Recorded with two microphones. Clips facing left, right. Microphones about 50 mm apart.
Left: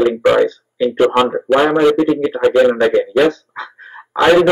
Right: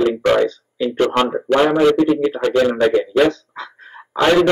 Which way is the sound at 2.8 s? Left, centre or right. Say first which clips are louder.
Left 2 dB; centre.